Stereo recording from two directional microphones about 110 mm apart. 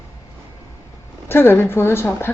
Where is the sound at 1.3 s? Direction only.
20° left (ahead or behind).